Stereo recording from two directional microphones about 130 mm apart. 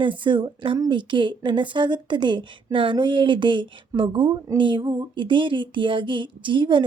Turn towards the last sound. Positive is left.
turn(degrees=-40)  # may be behind; listen again after turning